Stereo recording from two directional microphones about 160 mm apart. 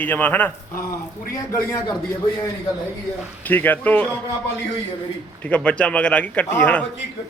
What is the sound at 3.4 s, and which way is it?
Speech, 10° left (ahead or behind).